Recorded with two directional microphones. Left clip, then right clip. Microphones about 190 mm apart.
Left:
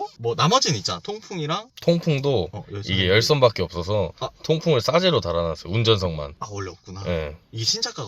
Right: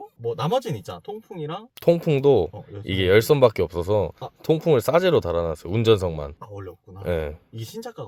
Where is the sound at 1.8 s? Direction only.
50° right (ahead or behind).